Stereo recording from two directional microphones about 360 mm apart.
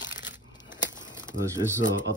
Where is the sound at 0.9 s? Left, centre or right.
Centre.